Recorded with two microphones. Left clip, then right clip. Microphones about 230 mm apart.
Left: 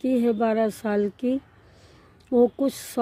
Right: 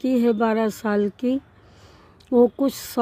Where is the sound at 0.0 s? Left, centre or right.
Centre.